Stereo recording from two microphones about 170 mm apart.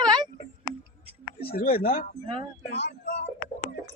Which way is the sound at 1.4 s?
65° left (ahead or behind).